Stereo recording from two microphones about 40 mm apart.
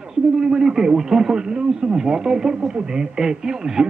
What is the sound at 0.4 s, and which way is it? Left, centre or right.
Speech, centre.